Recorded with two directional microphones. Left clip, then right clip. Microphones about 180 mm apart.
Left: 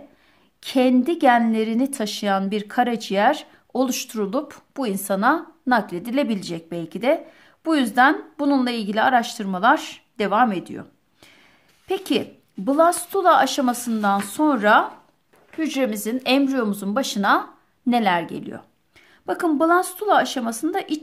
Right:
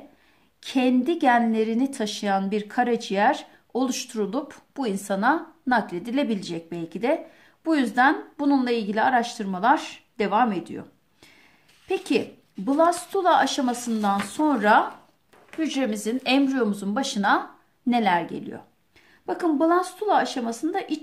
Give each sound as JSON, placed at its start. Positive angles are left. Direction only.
{"t": 0.6, "sound": "a woman's voice", "side_deg": 35}